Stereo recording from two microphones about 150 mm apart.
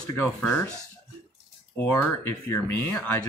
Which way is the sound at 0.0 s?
15° left (ahead or behind).